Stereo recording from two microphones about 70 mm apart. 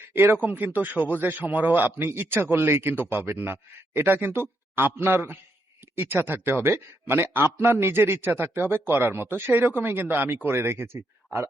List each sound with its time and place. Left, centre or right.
0.1 s a man's voice: right